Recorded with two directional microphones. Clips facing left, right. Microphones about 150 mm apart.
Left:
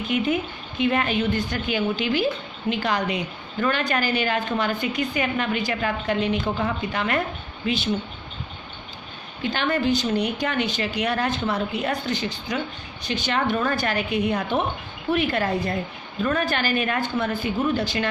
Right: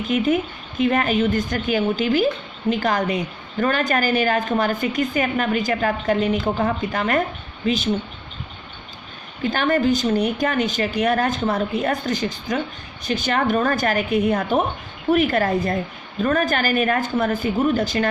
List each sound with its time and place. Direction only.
0.8 s speech: 40° right (ahead or behind)
9.4 s speech: 45° right (ahead or behind)